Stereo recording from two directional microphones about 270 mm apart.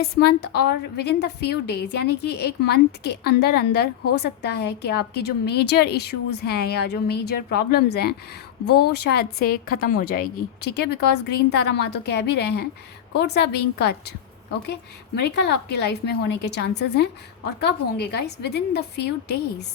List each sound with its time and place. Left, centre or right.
0.0 s a woman's voice: left